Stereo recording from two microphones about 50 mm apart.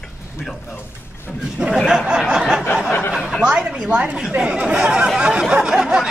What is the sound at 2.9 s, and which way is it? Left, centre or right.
Speech, left.